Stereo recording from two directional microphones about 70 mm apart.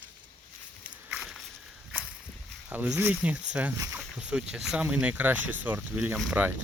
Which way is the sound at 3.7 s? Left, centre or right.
Right.